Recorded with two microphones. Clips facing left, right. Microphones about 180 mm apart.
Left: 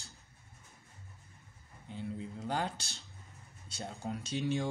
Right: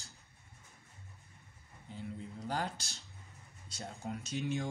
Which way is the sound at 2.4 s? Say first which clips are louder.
Left 2 dB; 25° left (ahead or behind).